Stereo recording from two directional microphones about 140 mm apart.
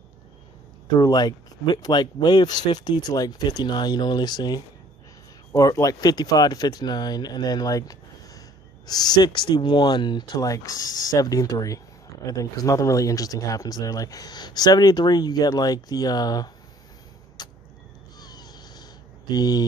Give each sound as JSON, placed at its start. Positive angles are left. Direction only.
{"t": 0.9, "sound": "speech", "side_deg": 30}
{"t": 17.4, "sound": "vehicle", "side_deg": 30}
{"t": 18.2, "sound": "cat", "side_deg": 30}